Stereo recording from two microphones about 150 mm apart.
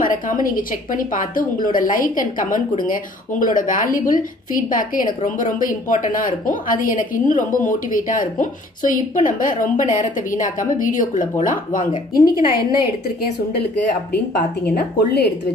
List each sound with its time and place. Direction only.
0.0 s a woman's voice: 65° left (ahead or behind)
14.7 s speech: 90° left